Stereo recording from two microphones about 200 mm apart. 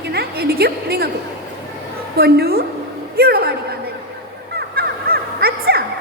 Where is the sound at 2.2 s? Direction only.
50° right (ahead or behind).